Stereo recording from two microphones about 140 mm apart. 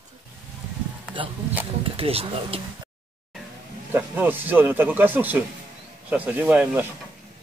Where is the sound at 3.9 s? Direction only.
15° right (ahead or behind).